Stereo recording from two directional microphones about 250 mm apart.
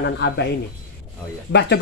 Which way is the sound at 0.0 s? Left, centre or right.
Left.